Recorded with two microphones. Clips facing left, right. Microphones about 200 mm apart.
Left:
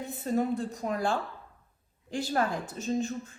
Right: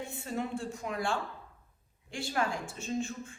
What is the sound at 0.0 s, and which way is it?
A woman's voice, 35° left (ahead or behind).